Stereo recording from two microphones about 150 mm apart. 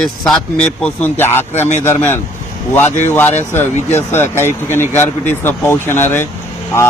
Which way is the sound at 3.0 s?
15° left (ahead or behind).